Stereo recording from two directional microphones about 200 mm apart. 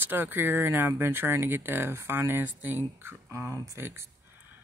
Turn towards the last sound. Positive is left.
turn(degrees=-10)  # may be behind; listen again after turning